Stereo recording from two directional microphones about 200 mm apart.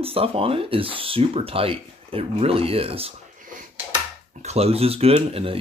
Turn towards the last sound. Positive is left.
turn(degrees=-30)  # may be behind; listen again after turning